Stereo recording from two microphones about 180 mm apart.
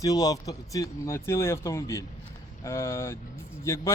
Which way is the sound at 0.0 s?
20° left (ahead or behind).